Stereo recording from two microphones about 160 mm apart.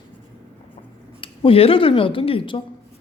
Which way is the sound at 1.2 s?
35° left (ahead or behind).